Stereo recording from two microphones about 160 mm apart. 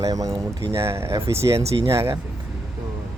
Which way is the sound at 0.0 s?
20° right (ahead or behind).